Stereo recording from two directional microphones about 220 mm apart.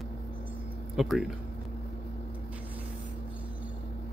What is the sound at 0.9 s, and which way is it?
Speech, centre (ahead or behind).